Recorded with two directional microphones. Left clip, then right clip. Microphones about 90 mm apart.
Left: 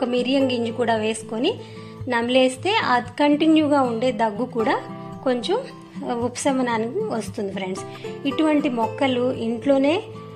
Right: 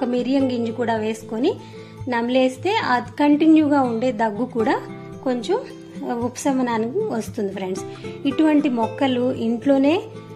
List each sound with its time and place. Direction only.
0.0 s a woman's voice: 15° right (ahead or behind)
2.0 s a woman's voice: 5° right (ahead or behind); by 4.5 s 20° right (ahead or behind)
5.2 s speech: 5° right (ahead or behind)
5.6 s a woman's voice: 15° right (ahead or behind)
7.1 s a woman's voice: 25° right (ahead or behind)